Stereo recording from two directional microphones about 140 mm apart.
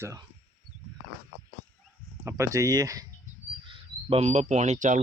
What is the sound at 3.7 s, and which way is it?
Speech, 50° right (ahead or behind).